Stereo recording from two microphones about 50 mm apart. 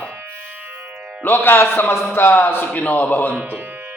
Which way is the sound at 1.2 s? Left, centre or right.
Left.